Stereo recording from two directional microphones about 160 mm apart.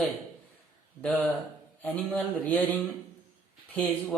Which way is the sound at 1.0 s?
10° left (ahead or behind).